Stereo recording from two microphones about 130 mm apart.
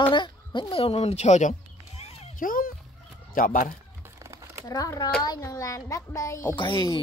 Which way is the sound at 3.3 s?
90° left.